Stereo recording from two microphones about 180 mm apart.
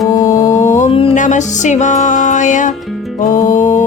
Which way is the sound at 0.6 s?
45° left (ahead or behind).